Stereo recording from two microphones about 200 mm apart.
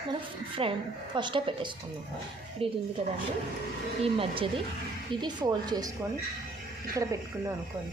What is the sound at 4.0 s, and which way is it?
Speech, 25° right (ahead or behind).